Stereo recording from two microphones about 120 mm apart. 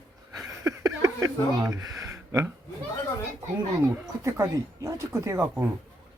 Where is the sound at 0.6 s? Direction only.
30° right (ahead or behind).